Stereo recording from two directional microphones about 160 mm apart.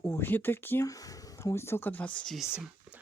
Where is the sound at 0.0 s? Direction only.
15° left (ahead or behind).